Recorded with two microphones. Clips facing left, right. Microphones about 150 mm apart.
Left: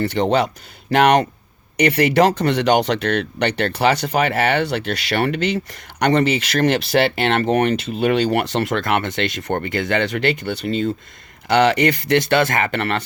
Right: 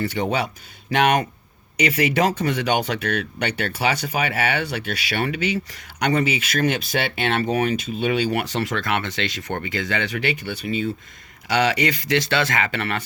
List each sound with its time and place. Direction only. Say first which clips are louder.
0.0 s speech: left 5 dB; 65° left (ahead or behind)
7.9 s speech: left 5 dB; 60° left (ahead or behind)
11.4 s speech: left 5 dB; 55° left (ahead or behind)